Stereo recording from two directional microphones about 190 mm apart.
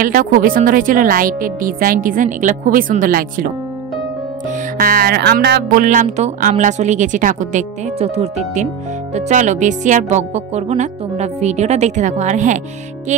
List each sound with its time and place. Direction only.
0.0 s speech: 45° right (ahead or behind)
4.5 s music: 50° right (ahead or behind)
5.9 s speech: 40° right (ahead or behind)